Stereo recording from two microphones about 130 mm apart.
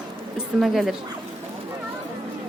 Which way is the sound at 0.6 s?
Centre (ahead or behind).